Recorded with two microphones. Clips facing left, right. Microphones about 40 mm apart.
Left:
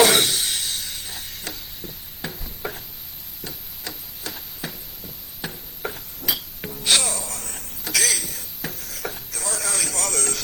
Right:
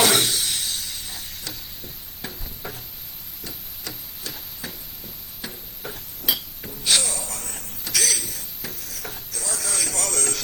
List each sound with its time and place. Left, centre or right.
0.0 s cough: left
2.2 s a sound: left
5.8 s tick-tock: left
6.2 s hammer: left
6.8 s music: left
7.9 s a sound: left